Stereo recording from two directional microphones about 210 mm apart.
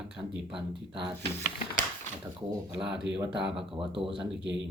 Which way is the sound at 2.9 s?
55° right (ahead or behind).